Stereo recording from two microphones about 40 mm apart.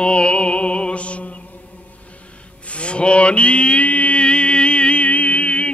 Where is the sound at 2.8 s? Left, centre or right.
Left.